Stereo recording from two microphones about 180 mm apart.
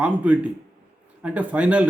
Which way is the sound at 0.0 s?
10° right (ahead or behind).